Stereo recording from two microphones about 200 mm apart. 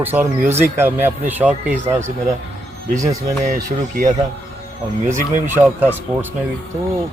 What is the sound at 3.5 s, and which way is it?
Speech, 40° right (ahead or behind).